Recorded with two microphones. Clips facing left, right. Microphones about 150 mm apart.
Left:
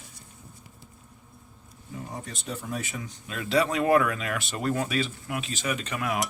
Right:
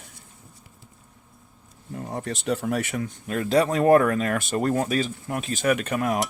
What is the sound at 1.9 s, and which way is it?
Speech, 65° right (ahead or behind).